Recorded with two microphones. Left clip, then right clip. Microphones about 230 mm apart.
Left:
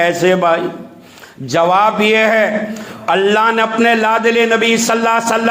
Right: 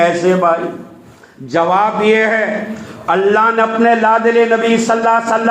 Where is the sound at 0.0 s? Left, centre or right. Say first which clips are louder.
Even; left.